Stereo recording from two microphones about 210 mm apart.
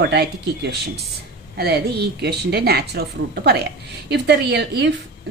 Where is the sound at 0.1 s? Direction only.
50° right (ahead or behind).